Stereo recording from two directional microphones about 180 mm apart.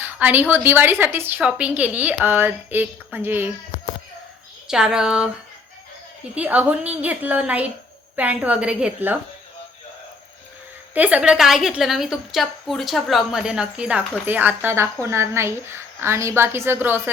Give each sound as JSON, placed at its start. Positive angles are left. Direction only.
{"t": 0.0, "sound": "a woman's voice", "side_deg": -10}
{"t": 3.7, "sound": "a sound", "side_deg": 45}
{"t": 4.7, "sound": "a woman's voice", "side_deg": -5}
{"t": 6.3, "sound": "a woman's voice", "side_deg": -10}
{"t": 10.9, "sound": "a woman's voice", "side_deg": -10}